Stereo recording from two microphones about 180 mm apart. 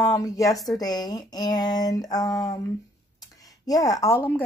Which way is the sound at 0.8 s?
20° left (ahead or behind).